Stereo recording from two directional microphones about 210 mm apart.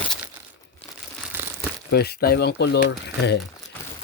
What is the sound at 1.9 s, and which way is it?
Speech, 50° left (ahead or behind).